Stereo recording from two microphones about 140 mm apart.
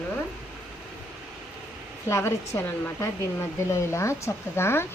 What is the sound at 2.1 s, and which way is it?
Speech, 20° left (ahead or behind).